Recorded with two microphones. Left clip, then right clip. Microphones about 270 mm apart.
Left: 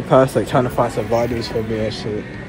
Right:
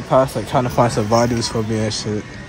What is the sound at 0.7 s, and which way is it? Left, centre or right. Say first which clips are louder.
Speech: right 2 dB; right.